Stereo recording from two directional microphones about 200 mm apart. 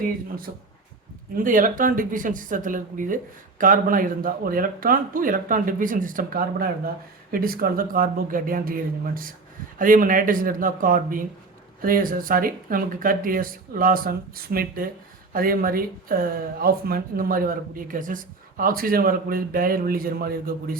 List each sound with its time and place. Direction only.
1.5 s speech: 40° right (ahead or behind)